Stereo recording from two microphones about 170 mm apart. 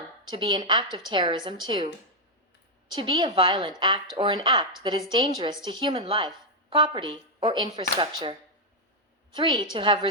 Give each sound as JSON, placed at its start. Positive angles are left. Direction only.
{"t": 0.3, "sound": "a woman's voice", "side_deg": -30}
{"t": 2.9, "sound": "a woman's voice", "side_deg": -30}